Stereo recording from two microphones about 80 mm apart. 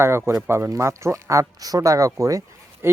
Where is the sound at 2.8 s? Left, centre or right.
Right.